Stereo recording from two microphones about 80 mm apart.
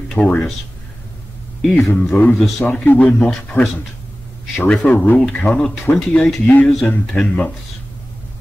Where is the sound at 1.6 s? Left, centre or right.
Centre.